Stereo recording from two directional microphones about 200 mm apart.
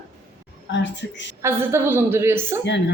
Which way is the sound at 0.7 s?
60° left (ahead or behind).